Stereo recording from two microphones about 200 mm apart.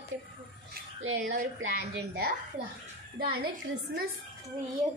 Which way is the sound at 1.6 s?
55° right (ahead or behind).